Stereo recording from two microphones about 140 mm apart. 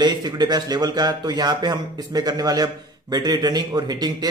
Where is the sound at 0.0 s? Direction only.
30° right (ahead or behind).